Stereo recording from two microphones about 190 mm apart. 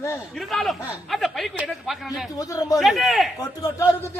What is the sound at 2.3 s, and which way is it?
Speech, 20° left (ahead or behind).